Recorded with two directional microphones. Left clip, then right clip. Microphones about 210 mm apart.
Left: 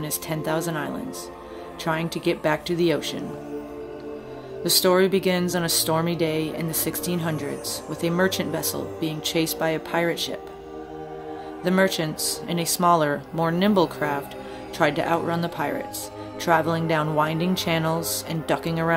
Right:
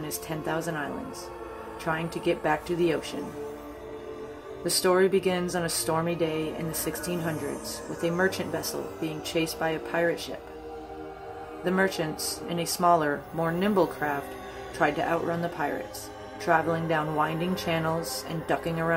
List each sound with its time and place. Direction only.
0.3 s speech: 30° left (ahead or behind)
1.9 s speech: 30° left (ahead or behind)
4.6 s speech: 25° left (ahead or behind)
11.6 s speech: 30° left (ahead or behind)